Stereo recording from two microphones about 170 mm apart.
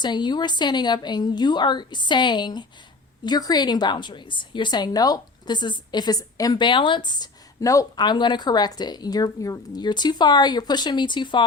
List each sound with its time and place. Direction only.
0.0 s a woman's voice: 25° left (ahead or behind)